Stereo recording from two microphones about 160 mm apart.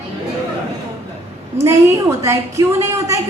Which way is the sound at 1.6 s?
20° right (ahead or behind).